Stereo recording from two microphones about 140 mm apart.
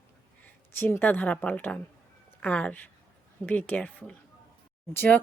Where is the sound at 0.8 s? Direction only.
15° left (ahead or behind).